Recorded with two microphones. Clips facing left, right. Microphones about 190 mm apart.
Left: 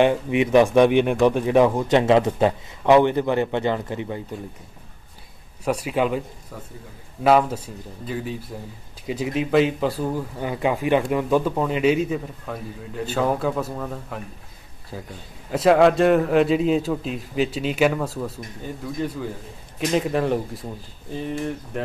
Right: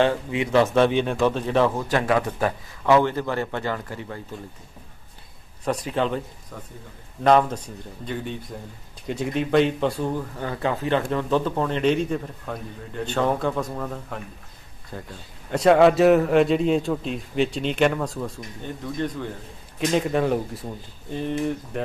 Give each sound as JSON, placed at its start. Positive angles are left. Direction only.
{"t": 0.0, "sound": "a man's voice", "side_deg": 20}
{"t": 5.7, "sound": "speech", "side_deg": 10}
{"t": 7.2, "sound": "a man's voice", "side_deg": 5}